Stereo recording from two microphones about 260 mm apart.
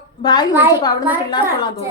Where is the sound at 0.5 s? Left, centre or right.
Centre.